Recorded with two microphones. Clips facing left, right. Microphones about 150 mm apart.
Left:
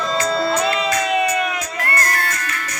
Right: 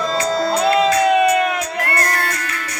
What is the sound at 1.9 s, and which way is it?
Music, 45° left (ahead or behind).